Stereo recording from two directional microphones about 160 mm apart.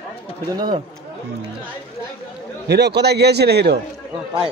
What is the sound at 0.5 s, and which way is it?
Speech, 25° right (ahead or behind).